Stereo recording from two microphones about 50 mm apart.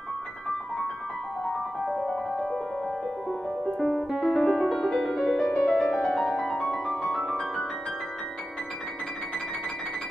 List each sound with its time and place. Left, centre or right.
3.8 s music: centre
5.5 s music: left
5.8 s music: centre
6.6 s music: left
7.1 s music: centre